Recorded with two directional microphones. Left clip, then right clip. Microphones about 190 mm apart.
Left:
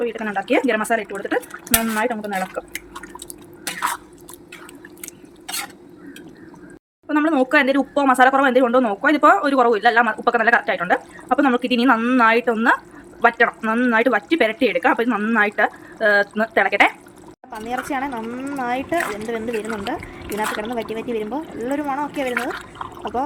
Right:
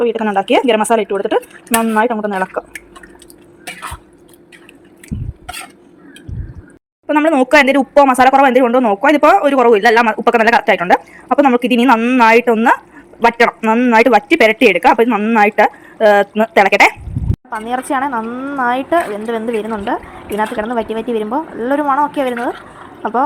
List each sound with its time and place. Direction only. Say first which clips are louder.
0.0 s speech: right 9 dB; 20° right (ahead or behind)
7.1 s speech: right 7 dB; 20° right (ahead or behind)
13.6 s speech: right 8 dB; 15° right (ahead or behind)
17.5 s speech: right 7 dB; 10° right (ahead or behind)
21.2 s speech: right 8 dB; 25° right (ahead or behind)
21.7 s speech: right 10 dB; 5° right (ahead or behind)